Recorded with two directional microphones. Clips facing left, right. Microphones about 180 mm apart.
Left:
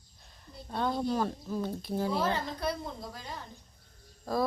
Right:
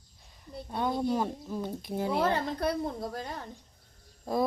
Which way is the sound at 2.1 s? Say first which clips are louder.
Right 3 dB; 60° right (ahead or behind).